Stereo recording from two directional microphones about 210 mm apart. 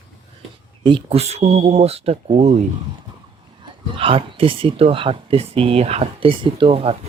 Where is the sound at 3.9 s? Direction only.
25° right (ahead or behind).